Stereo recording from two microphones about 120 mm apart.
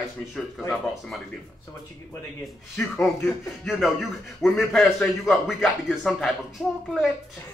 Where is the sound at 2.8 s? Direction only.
5° left (ahead or behind).